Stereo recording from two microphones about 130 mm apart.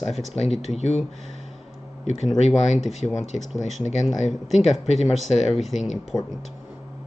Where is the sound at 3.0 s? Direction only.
30° left (ahead or behind).